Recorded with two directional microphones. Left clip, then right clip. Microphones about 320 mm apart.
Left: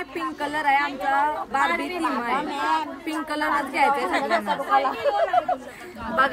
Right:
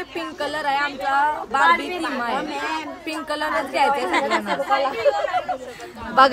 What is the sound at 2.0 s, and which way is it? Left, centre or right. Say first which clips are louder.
Speech: even; centre.